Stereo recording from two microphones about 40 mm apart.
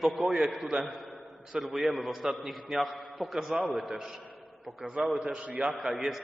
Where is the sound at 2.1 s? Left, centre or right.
Centre.